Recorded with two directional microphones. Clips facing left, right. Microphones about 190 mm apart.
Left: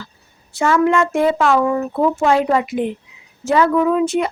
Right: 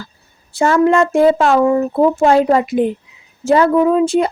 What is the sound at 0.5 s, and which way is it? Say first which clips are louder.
Speech: right 3 dB; 35° right (ahead or behind).